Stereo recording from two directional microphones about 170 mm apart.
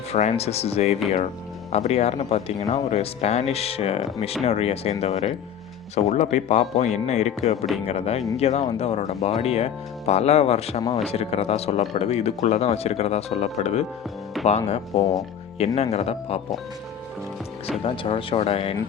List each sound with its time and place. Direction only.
0.1 s speech: 40° left (ahead or behind)
17.8 s speech: 30° left (ahead or behind)